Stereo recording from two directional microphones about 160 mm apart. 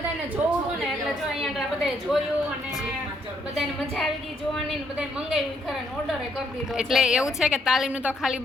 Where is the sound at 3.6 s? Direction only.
Centre (ahead or behind).